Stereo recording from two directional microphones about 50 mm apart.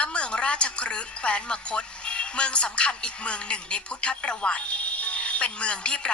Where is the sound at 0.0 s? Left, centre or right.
Left.